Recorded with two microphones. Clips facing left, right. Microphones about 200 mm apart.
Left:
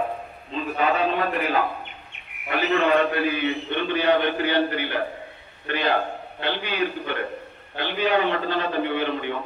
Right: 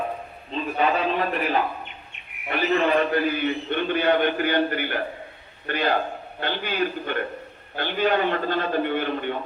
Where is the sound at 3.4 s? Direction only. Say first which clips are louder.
Even; 50° right (ahead or behind).